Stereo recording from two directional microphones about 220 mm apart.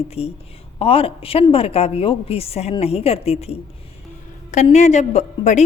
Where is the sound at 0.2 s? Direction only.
30° left (ahead or behind).